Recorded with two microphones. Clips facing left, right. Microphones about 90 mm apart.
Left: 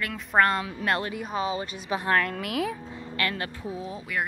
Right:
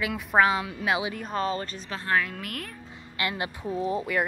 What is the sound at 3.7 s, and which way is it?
Speech, centre (ahead or behind).